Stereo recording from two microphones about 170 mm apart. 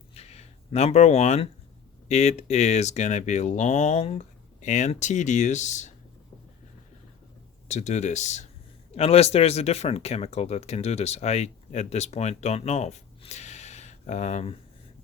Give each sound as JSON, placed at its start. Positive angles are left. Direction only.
{"t": 0.1, "sound": "a sound", "side_deg": 40}
{"t": 2.0, "sound": "speech", "side_deg": 40}
{"t": 7.7, "sound": "speech", "side_deg": 45}